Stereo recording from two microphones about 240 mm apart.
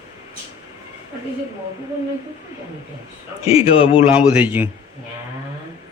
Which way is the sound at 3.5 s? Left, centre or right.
Left.